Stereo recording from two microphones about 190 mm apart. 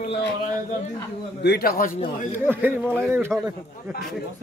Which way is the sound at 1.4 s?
55° left (ahead or behind).